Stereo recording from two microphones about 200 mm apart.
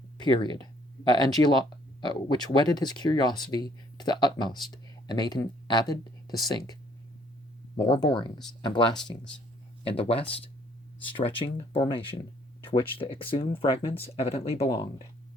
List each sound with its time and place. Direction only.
0.2 s speech: 25° left (ahead or behind)
7.8 s speech: 20° left (ahead or behind)
11.3 s speech: 25° left (ahead or behind)